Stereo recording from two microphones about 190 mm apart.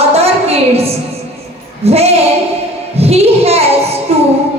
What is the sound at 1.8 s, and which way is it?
Speech, 35° right (ahead or behind).